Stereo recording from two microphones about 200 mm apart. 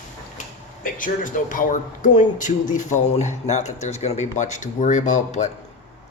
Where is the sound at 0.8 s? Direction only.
45° left (ahead or behind).